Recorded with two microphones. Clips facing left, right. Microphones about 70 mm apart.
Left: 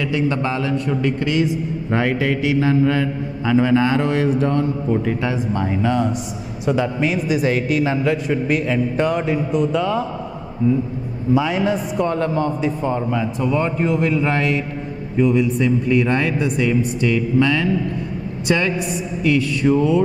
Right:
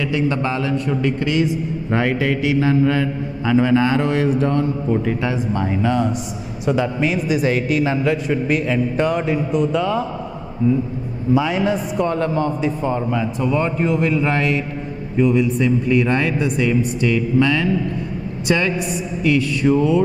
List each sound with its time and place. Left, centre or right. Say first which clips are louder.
0.0 s a man's voice: even; centre
11.3 s a man's voice: even; centre